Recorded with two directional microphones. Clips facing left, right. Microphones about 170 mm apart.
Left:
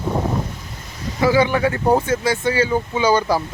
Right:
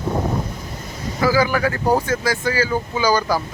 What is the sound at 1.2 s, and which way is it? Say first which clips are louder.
Speech: left 2 dB; 25° left (ahead or behind).